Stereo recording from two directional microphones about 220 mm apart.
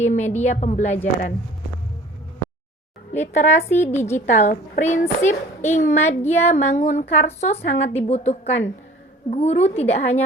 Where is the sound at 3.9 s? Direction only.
10° left (ahead or behind).